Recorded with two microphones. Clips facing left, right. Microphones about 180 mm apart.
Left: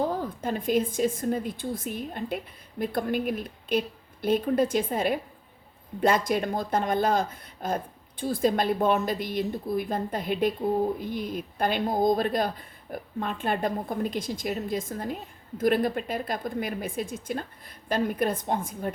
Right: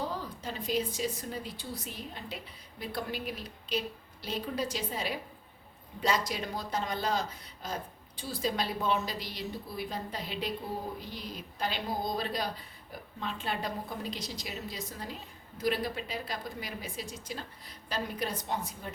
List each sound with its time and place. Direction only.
0.0 s speech: 50° left (ahead or behind)